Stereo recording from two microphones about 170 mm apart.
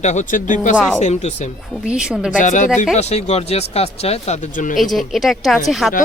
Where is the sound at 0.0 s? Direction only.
45° left (ahead or behind).